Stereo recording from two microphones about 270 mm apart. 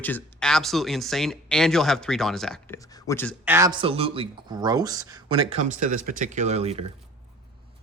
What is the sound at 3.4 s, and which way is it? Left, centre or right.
Speech, centre.